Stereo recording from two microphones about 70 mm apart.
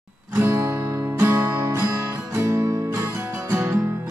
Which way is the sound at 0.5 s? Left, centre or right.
Right.